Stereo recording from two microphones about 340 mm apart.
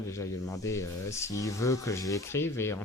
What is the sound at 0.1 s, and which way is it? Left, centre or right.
Speech, centre.